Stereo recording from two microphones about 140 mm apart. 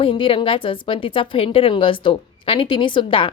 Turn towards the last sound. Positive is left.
turn(degrees=35)  # may be behind; listen again after turning